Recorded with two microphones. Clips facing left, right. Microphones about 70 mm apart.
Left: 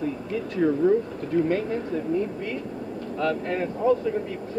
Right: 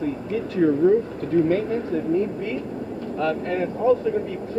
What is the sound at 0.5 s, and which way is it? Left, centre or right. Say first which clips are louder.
A man's voice: right 3 dB; centre.